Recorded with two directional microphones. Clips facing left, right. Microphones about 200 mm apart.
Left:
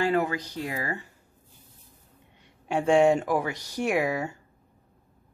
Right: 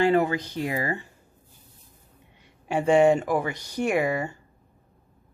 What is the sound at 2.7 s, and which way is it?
Speech, centre (ahead or behind).